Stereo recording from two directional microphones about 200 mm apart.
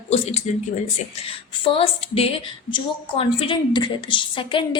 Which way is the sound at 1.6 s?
25° left (ahead or behind).